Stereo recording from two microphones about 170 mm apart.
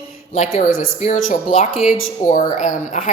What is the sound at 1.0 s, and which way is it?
Speech, 40° left (ahead or behind).